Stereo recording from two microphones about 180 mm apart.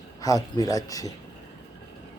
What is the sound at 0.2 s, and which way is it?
Speech, 20° left (ahead or behind).